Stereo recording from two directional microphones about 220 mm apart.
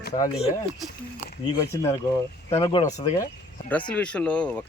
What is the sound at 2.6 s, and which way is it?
Speech, 25° left (ahead or behind).